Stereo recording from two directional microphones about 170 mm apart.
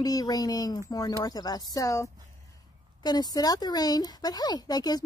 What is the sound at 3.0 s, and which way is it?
Speech, 25° left (ahead or behind).